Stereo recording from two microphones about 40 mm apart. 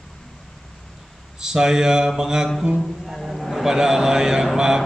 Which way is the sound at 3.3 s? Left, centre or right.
Centre.